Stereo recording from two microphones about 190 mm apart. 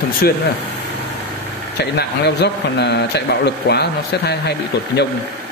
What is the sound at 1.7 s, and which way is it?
A man's voice, 60° left (ahead or behind).